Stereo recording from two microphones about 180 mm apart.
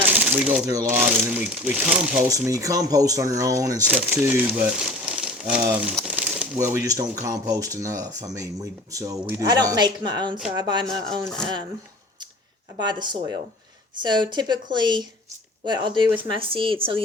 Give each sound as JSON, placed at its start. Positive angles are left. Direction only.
{"t": 0.0, "sound": "shuffling cards", "side_deg": -10}
{"t": 0.7, "sound": "speech", "side_deg": -15}
{"t": 0.9, "sound": "speech", "side_deg": -5}
{"t": 2.3, "sound": "speech", "side_deg": -20}
{"t": 6.0, "sound": "a sound", "side_deg": -5}
{"t": 6.8, "sound": "speech", "side_deg": -20}
{"t": 10.8, "sound": "speech", "side_deg": 5}
{"t": 12.8, "sound": "speech", "side_deg": -25}